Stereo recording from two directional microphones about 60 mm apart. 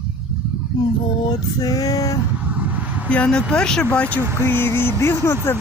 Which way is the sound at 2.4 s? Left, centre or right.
Right.